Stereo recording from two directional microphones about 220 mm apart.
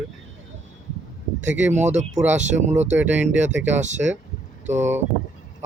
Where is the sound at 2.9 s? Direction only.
5° right (ahead or behind).